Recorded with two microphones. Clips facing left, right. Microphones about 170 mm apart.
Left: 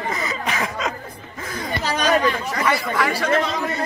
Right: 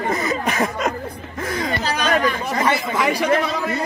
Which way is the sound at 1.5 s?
80° right.